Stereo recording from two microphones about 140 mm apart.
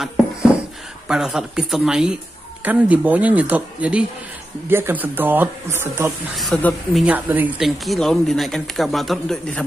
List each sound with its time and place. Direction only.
1.0 s speech: 5° right (ahead or behind)
6.3 s speech: centre (ahead or behind)